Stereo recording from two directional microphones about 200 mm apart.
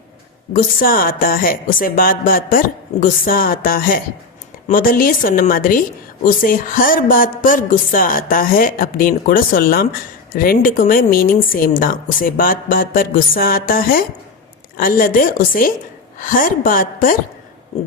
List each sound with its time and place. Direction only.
0.5 s a woman's voice: 45° left (ahead or behind)